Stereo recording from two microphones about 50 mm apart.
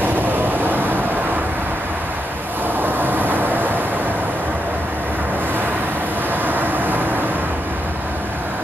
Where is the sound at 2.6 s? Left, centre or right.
Right.